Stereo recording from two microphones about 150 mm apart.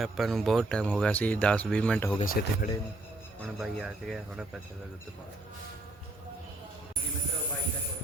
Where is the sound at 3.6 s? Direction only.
Centre (ahead or behind).